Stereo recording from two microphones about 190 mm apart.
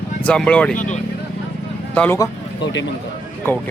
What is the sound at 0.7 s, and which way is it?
Speech, 40° left (ahead or behind).